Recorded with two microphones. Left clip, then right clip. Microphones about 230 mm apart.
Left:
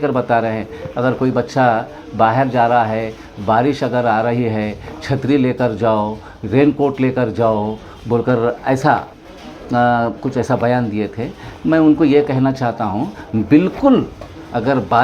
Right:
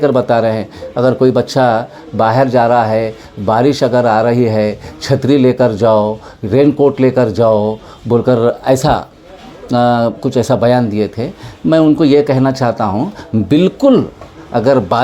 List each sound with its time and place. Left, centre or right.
0.0 s speech: right